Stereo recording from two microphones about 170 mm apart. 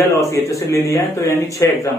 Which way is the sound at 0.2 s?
20° left (ahead or behind).